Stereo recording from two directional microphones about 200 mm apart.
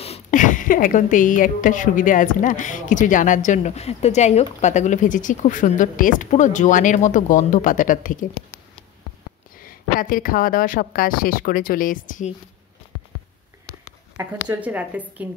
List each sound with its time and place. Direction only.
0.0 s a woman's voice: 35° left (ahead or behind)
9.6 s a woman's voice: 45° left (ahead or behind)
14.5 s a woman's voice: 5° right (ahead or behind)